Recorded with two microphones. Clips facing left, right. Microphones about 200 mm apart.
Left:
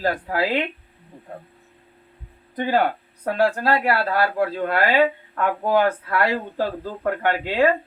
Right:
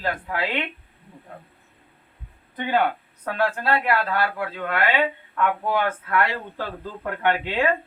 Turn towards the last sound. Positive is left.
turn(degrees=40)  # may be behind; listen again after turning